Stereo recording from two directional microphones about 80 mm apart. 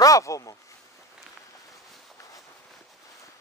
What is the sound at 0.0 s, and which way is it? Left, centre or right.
Speech, left.